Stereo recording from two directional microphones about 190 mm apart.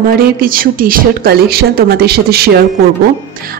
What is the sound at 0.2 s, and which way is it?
Speech, 50° right (ahead or behind).